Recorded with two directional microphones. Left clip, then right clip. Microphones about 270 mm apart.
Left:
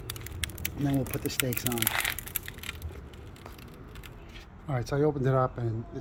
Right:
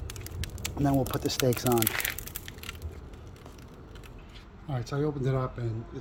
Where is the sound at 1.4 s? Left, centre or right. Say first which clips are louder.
Right 5 dB; centre.